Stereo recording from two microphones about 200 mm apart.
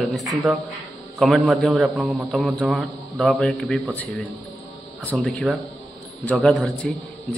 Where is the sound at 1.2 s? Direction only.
5° right (ahead or behind).